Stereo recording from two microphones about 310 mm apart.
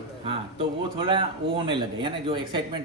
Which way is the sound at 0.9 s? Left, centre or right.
Centre.